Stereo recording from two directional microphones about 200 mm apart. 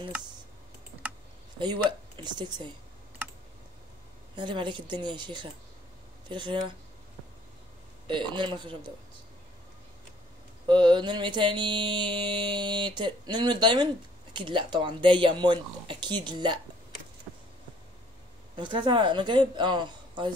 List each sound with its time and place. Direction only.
1.6 s speech: 20° right (ahead or behind)
4.4 s mantra: 25° right (ahead or behind)
6.2 s speech: 25° right (ahead or behind)
8.1 s mantra: 25° right (ahead or behind)
10.7 s mantra: 25° right (ahead or behind)
18.6 s mantra: 25° right (ahead or behind)